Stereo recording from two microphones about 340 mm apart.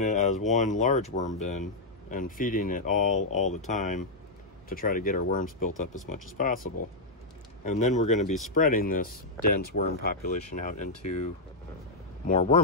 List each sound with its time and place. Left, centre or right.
0.0 s speech: left
7.8 s speech: left
12.3 s speech: centre